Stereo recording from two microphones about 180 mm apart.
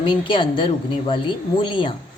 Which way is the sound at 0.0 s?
25° left (ahead or behind).